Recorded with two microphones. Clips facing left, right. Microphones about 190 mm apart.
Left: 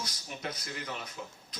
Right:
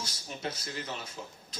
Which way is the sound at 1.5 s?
30° right (ahead or behind).